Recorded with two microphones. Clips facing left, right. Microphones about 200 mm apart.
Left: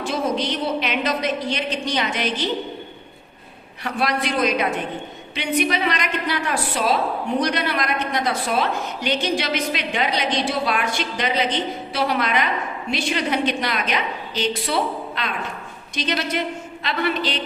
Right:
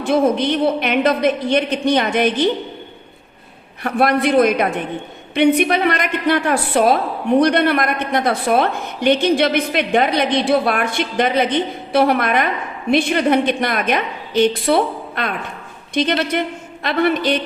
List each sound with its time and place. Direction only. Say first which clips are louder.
0.0 s a woman's voice: right 7 dB; 55° right (ahead or behind)
3.8 s a woman's voice: right 7 dB; 55° right (ahead or behind)